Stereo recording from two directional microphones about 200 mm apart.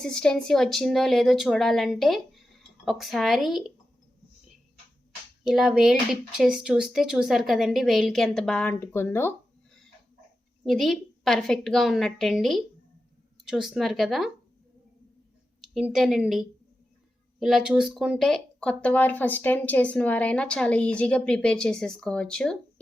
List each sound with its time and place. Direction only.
0.0 s speech: 5° left (ahead or behind)
5.4 s speech: centre (ahead or behind)
10.6 s speech: centre (ahead or behind)
15.6 s speech: centre (ahead or behind)